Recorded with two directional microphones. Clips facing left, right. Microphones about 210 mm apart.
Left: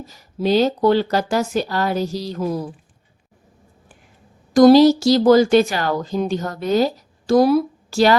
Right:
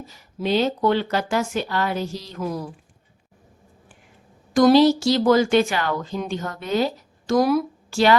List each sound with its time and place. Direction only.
0.1 s speech: 40° left (ahead or behind)
4.5 s speech: 40° left (ahead or behind)